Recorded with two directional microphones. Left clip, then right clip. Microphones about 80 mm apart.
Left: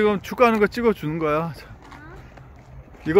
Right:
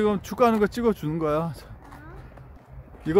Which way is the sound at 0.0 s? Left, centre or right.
Right.